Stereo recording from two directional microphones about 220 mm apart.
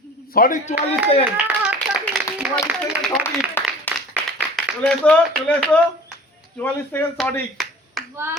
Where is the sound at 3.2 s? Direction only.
10° left (ahead or behind).